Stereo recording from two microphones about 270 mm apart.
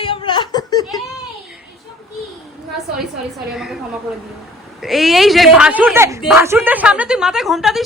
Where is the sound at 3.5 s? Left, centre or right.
Centre.